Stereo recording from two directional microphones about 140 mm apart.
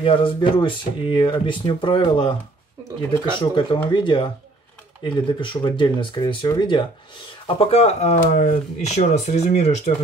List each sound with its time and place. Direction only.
0.0 s speech: 40° left (ahead or behind)
7.4 s speech: 45° left (ahead or behind)